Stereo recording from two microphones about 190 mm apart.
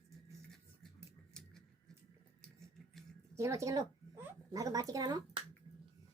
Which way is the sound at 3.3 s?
15° right (ahead or behind).